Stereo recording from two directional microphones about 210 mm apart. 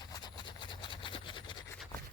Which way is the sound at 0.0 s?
20° left (ahead or behind).